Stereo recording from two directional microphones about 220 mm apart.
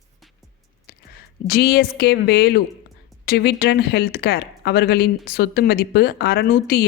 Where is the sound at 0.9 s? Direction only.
45° left (ahead or behind).